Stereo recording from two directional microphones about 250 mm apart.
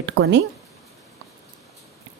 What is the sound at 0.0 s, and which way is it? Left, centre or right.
Speech, right.